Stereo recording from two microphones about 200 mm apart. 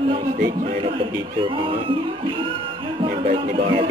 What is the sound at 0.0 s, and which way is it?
Music, 25° right (ahead or behind).